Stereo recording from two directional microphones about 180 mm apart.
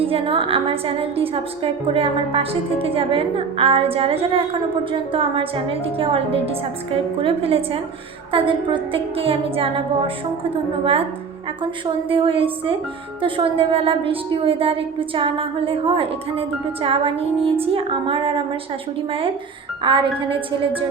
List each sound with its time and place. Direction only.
0.0 s a woman's voice: 30° right (ahead or behind)
19.8 s a woman's voice: 30° right (ahead or behind)